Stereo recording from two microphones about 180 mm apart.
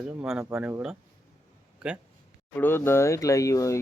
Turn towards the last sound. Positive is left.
turn(degrees=15)  # may be behind; listen again after turning